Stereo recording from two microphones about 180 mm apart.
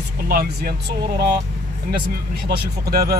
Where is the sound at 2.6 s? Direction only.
60° right (ahead or behind).